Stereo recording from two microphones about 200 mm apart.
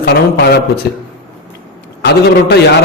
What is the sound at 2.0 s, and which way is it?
Speech, 55° left (ahead or behind).